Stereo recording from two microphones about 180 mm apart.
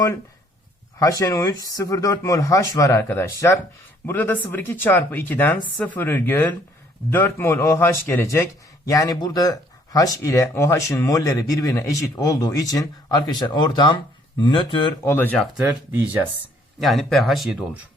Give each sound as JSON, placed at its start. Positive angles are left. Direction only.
{"t": 0.9, "sound": "speech", "side_deg": 20}
{"t": 15.1, "sound": "speech", "side_deg": 10}
{"t": 15.5, "sound": "speech", "side_deg": -10}
{"t": 16.8, "sound": "speech", "side_deg": 0}